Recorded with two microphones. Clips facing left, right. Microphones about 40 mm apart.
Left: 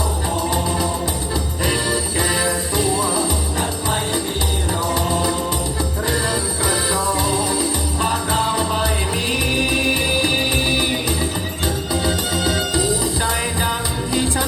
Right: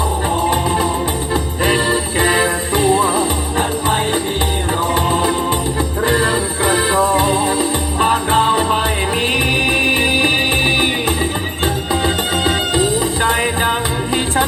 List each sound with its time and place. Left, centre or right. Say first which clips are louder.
0.3 s music: right 5 dB; right